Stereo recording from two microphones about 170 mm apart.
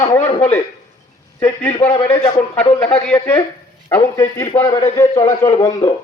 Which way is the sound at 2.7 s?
10° left (ahead or behind).